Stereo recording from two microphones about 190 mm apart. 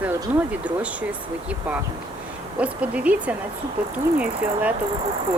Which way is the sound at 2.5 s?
5° right (ahead or behind).